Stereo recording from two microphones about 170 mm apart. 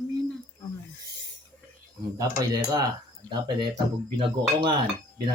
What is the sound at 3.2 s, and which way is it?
Speech, 10° left (ahead or behind).